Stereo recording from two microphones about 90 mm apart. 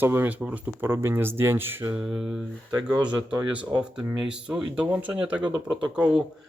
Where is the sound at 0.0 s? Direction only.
25° right (ahead or behind).